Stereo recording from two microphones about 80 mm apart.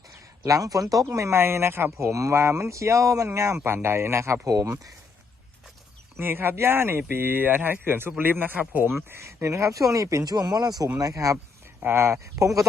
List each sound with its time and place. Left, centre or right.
0.1 s speech: right
6.1 s speech: right
9.0 s speech: right
10.3 s speech: right
11.8 s speech: right
12.2 s speech: right